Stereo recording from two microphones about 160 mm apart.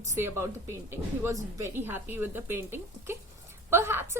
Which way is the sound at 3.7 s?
15° right (ahead or behind).